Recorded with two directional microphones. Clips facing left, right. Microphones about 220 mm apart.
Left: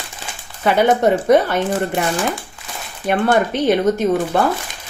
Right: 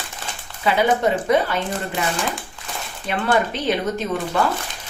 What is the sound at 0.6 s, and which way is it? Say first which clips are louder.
Speech: left 4 dB; 45° left (ahead or behind).